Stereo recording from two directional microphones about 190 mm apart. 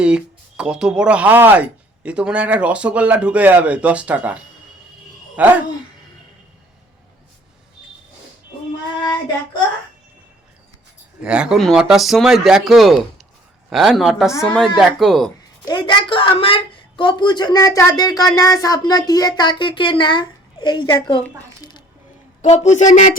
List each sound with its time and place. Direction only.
0.0 s speech: 5° right (ahead or behind)
5.4 s speech: 10° right (ahead or behind)
11.2 s speech: 5° right (ahead or behind)
14.3 s a woman's voice: 15° left (ahead or behind)
14.8 s speech: centre (ahead or behind)
15.6 s a woman's voice: 25° left (ahead or behind)
22.4 s speech: 35° left (ahead or behind)